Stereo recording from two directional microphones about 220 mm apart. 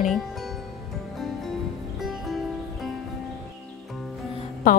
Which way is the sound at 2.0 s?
Centre (ahead or behind).